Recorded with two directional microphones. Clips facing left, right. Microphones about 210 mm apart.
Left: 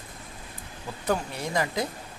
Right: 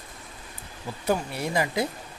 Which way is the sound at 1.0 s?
10° right (ahead or behind).